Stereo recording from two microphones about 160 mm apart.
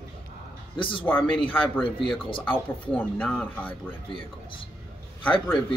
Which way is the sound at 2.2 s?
30° left (ahead or behind).